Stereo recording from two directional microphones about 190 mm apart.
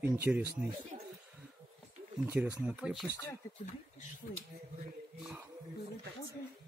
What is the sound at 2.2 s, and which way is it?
Speech, 10° right (ahead or behind).